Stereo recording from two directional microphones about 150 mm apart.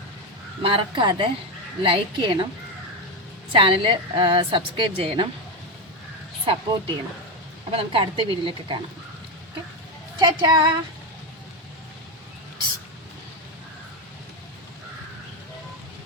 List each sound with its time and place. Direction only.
0.6 s a woman's voice: 35° right (ahead or behind)
3.5 s a woman's voice: 35° right (ahead or behind)
6.4 s a woman's voice: 35° right (ahead or behind)
10.2 s a woman's voice: 25° right (ahead or behind)